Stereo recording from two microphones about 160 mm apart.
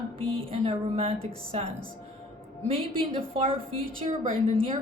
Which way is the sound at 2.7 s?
35° right (ahead or behind).